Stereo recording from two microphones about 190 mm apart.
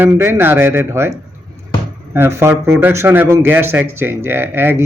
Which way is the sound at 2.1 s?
10° right (ahead or behind).